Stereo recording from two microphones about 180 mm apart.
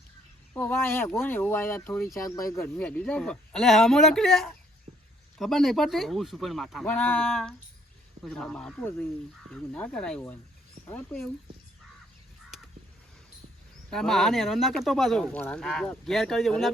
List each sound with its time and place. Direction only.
0.5 s speech: 15° left (ahead or behind)
2.7 s speech: 10° left (ahead or behind)
13.9 s speech: centre (ahead or behind)